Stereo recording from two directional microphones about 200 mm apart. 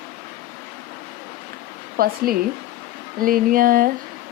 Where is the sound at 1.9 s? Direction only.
50° right (ahead or behind).